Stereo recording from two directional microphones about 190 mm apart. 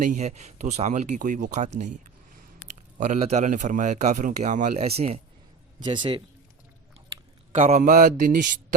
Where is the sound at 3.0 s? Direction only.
35° right (ahead or behind).